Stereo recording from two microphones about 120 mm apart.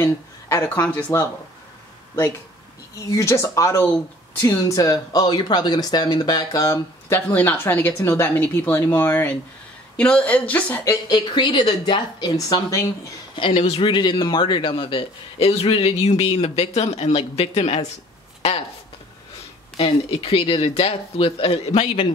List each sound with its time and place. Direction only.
0.0 s a sound: 25° left (ahead or behind)
0.7 s a woman's voice: 10° left (ahead or behind)
3.1 s a woman's voice: 25° left (ahead or behind)
10.8 s a woman's voice: 30° left (ahead or behind)
13.4 s speech: 50° left (ahead or behind)
19.8 s speech: 50° left (ahead or behind)